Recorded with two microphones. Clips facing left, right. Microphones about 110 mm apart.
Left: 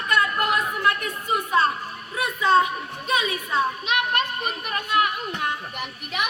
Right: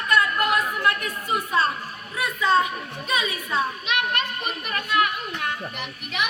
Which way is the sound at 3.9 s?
40° left (ahead or behind).